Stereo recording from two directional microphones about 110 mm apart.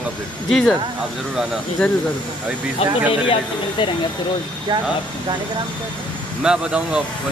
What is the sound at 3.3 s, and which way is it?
Speech, 50° left (ahead or behind).